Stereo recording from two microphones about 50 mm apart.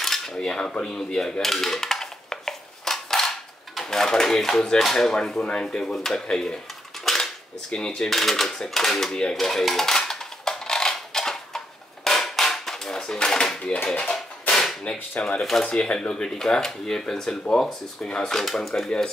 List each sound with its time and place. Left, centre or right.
0.0 s cutlery: centre
0.8 s dishes: centre
5.1 s speech: centre
7.1 s cutlery: centre
7.7 s speech: centre
8.5 s dishes: centre
14.5 s whip: centre
15.6 s speech: centre